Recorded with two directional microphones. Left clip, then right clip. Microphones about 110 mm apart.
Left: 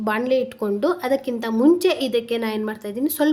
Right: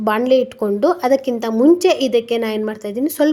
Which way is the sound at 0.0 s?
35° right (ahead or behind).